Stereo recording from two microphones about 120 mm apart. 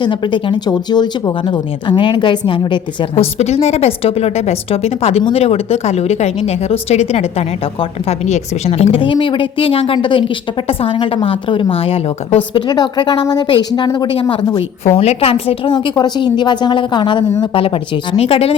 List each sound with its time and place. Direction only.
0.0 s a woman's voice: 40° left (ahead or behind)
3.3 s speech: 65° left (ahead or behind)
9.0 s a woman's voice: 45° left (ahead or behind)
12.5 s a woman's voice: 40° left (ahead or behind); by 18.5 s 55° left (ahead or behind)